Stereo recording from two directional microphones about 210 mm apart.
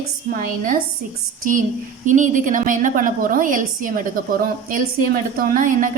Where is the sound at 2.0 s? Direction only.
35° right (ahead or behind).